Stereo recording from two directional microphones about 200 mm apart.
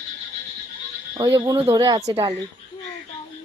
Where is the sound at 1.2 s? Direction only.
20° right (ahead or behind).